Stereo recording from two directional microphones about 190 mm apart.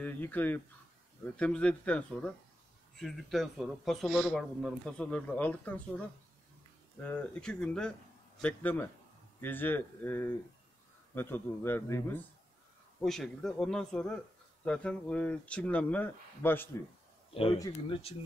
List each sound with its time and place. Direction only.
0.0 s speech: 10° left (ahead or behind)
17.3 s speech: 30° left (ahead or behind)